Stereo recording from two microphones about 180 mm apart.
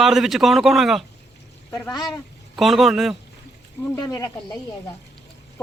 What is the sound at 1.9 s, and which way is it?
Speech, 20° left (ahead or behind).